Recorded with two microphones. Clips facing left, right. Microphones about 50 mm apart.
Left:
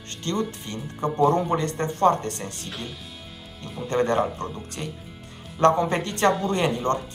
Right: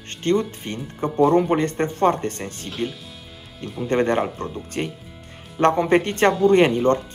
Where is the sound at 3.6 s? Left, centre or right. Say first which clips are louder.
Right 5 dB; centre.